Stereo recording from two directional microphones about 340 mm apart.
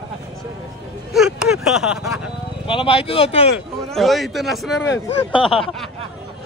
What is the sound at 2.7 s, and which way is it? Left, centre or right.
Speech, centre.